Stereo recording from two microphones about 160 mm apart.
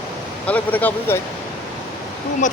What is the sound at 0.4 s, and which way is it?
Speech, 10° left (ahead or behind).